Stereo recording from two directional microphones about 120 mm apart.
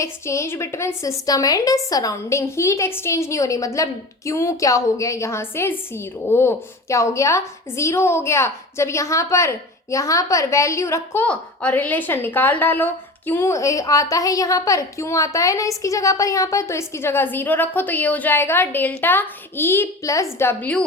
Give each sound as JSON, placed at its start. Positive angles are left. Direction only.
{"t": 0.0, "sound": "a woman's voice", "side_deg": 25}